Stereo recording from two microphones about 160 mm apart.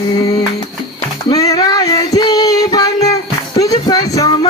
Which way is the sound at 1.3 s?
25° left (ahead or behind).